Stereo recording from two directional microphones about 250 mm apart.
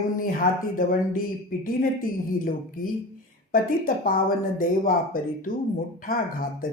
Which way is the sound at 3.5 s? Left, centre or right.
Left.